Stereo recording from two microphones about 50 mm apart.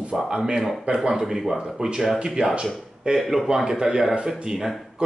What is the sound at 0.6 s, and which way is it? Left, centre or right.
A man's voice, centre.